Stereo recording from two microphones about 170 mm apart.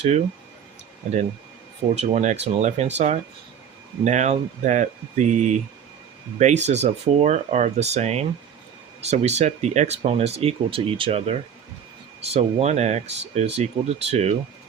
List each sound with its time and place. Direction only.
2.0 s speech: 40° right (ahead or behind)